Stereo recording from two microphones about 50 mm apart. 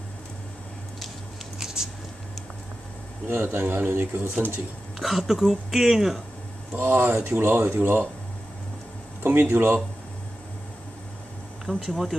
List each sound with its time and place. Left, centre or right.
1.6 s a sound: centre
3.3 s speech: right
3.8 s speech: right
4.9 s speech: centre
6.7 s speech: right
9.2 s speech: right
11.6 s speech: centre